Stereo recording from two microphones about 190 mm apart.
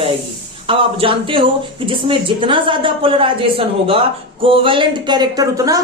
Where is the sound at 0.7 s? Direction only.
25° right (ahead or behind).